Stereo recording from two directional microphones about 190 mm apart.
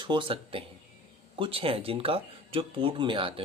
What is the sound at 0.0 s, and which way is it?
Speech, 25° right (ahead or behind).